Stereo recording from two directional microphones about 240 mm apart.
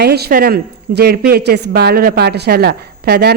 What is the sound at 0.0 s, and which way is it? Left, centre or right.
Speech, right.